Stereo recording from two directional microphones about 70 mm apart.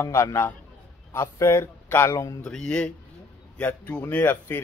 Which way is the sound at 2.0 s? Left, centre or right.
Left.